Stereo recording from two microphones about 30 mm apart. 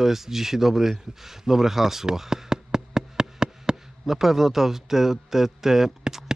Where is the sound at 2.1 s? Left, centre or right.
Centre.